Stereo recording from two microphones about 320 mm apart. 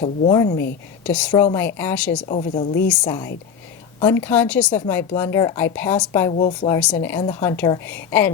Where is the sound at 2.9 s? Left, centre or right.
Centre.